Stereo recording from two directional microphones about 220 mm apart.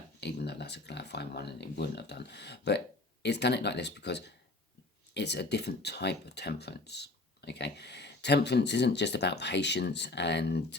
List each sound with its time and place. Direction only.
0.2 s speech: 50° left (ahead or behind)